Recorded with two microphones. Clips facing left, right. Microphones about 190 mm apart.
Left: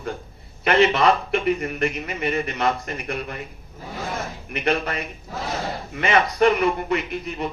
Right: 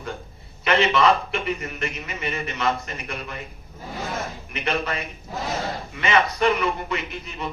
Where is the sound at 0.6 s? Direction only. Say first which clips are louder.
Left 2 dB; 50° left (ahead or behind).